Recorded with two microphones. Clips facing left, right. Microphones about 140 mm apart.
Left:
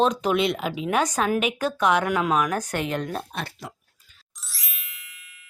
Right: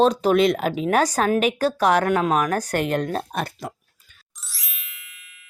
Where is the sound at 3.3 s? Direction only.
45° right (ahead or behind).